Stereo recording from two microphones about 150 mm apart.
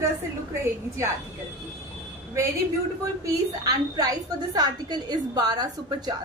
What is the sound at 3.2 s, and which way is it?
A woman's voice, 25° right (ahead or behind).